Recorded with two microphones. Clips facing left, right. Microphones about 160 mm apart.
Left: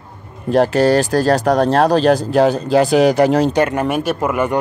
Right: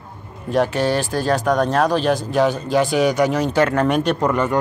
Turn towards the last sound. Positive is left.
turn(degrees=10)  # may be behind; listen again after turning